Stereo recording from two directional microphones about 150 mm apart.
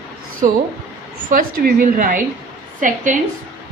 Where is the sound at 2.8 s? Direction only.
60° right (ahead or behind).